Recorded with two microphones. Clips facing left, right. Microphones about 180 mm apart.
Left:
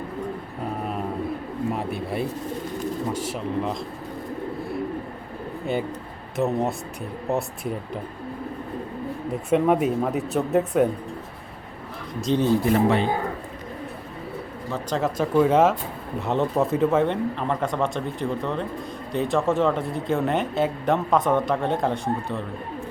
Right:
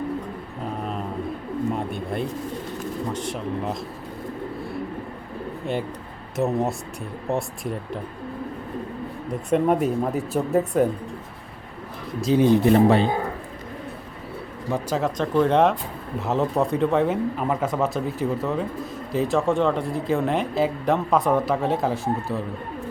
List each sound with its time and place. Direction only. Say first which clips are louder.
1.7 s speech: even; 5° left (ahead or behind)
6.3 s speech: even; centre (ahead or behind)
9.3 s speech: even; centre (ahead or behind)
12.2 s speech: right 3 dB; 5° right (ahead or behind)
12.5 s speech: right 4 dB; 25° right (ahead or behind)
14.7 s speech: right 1 dB; 5° right (ahead or behind)
15.2 s speech: left 1 dB; 5° left (ahead or behind)